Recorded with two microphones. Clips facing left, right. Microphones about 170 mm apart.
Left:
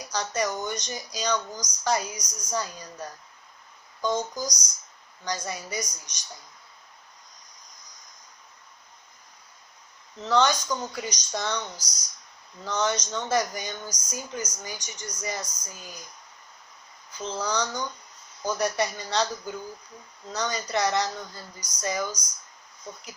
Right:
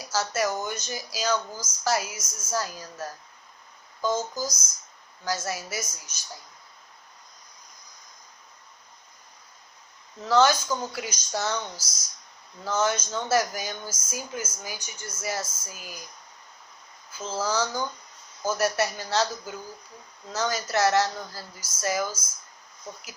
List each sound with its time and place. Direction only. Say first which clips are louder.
0.1 s speech: right 2 dB; 5° right (ahead or behind)
10.2 s speech: right 2 dB; 5° right (ahead or behind)
17.1 s speech: right 1 dB; 5° right (ahead or behind)
20.3 s speech: right 2 dB; 5° right (ahead or behind)